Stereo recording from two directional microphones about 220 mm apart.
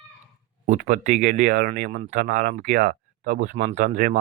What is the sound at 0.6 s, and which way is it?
Speech, 35° right (ahead or behind).